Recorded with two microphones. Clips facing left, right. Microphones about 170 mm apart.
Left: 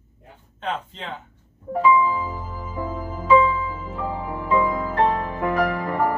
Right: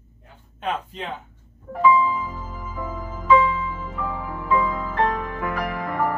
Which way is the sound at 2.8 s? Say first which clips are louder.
Right 1 dB; 30° left (ahead or behind).